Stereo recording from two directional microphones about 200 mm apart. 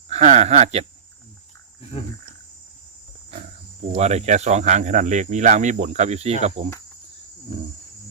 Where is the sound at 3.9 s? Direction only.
35° right (ahead or behind).